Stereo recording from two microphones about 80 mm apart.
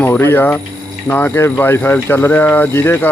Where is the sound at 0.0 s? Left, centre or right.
Left.